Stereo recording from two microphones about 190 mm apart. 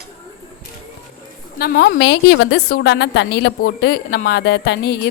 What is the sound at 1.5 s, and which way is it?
Speech, 55° left (ahead or behind).